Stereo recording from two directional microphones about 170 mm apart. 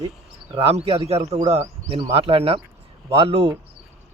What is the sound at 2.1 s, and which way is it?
Speech, 35° right (ahead or behind).